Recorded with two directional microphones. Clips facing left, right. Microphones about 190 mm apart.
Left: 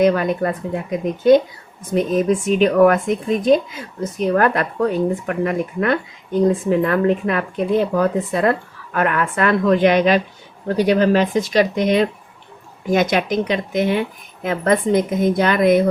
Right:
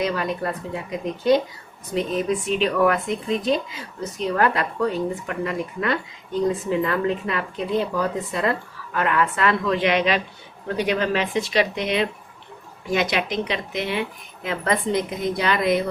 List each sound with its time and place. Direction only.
0.0 s speech: 50° left (ahead or behind)